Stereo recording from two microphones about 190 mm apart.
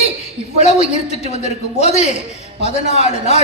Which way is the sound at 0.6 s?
35° left (ahead or behind).